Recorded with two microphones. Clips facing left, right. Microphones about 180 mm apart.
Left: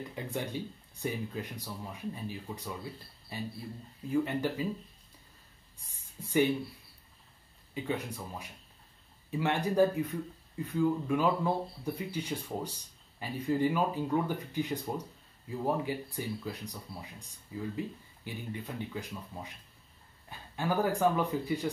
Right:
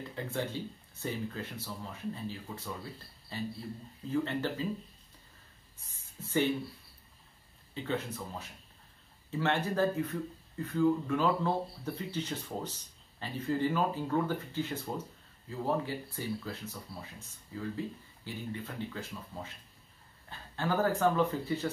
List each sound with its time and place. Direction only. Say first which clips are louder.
0.1 s speech: right 2 dB; 15° left (ahead or behind)
5.9 s a sound: left 3 dB; 15° left (ahead or behind)
7.7 s speech: even; 15° left (ahead or behind)